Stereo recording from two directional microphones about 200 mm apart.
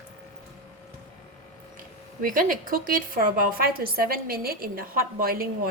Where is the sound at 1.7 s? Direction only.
45° right (ahead or behind).